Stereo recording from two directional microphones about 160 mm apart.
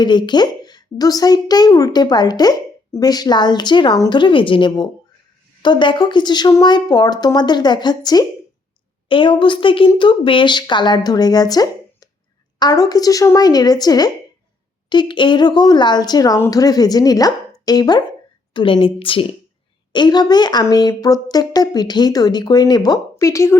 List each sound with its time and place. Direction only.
0.0 s a woman's voice: 30° left (ahead or behind)